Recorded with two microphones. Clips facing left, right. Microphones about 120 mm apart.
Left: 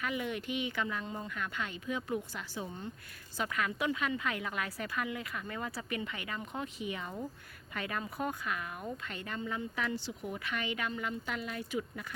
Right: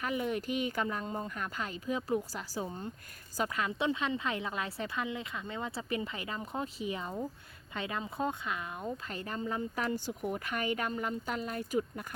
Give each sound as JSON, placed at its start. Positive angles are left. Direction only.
{"t": 0.0, "sound": "a woman's voice", "side_deg": -35}
{"t": 9.0, "sound": "speech", "side_deg": -35}